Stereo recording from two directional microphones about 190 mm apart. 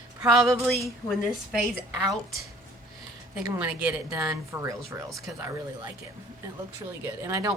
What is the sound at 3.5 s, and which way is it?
Speech, 5° right (ahead or behind).